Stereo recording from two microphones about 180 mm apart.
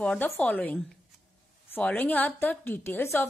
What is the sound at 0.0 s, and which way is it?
A woman's voice, 5° left (ahead or behind).